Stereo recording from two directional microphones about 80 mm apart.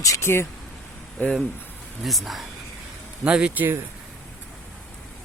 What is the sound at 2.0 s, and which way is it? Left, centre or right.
Speech, centre.